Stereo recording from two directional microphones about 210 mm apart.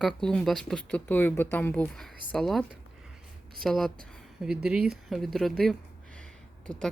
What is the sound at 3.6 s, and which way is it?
Speech, centre (ahead or behind).